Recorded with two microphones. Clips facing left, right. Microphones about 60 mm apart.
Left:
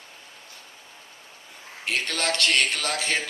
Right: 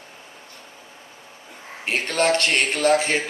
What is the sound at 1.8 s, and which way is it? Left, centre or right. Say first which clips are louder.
Speech: right 6 dB; right.